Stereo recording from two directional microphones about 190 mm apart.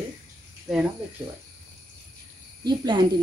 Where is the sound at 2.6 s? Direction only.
25° right (ahead or behind).